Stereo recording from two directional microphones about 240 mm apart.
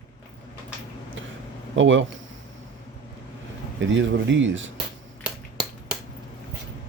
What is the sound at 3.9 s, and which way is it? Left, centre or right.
Speech, right.